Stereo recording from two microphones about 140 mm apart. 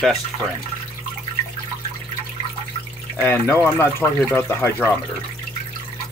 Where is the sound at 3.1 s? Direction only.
10° left (ahead or behind).